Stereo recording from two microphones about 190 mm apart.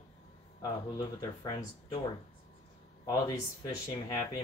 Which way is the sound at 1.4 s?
20° left (ahead or behind).